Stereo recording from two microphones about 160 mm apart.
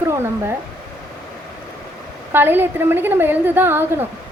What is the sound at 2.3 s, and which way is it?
A woman's voice, 10° right (ahead or behind).